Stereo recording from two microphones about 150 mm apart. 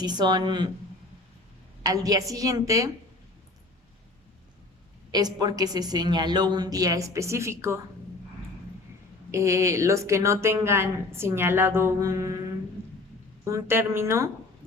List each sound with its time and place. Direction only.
0.0 s speech: 30° right (ahead or behind)
1.8 s speech: 25° right (ahead or behind)
5.1 s speech: 25° right (ahead or behind)
9.3 s speech: 20° right (ahead or behind)
13.4 s a woman's voice: 20° right (ahead or behind)